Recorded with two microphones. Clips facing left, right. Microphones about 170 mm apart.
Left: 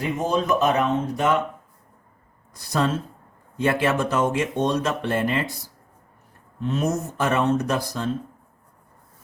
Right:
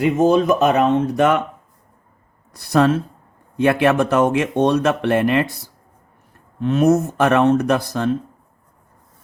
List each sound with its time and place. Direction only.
0.0 s speech: 75° right (ahead or behind)
2.5 s speech: 65° right (ahead or behind)
6.6 s speech: 65° right (ahead or behind)